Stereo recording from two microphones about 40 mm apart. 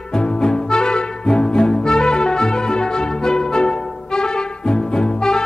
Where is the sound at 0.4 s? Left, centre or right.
Centre.